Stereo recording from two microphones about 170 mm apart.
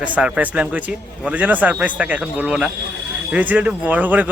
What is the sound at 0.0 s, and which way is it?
A man's voice, 5° right (ahead or behind).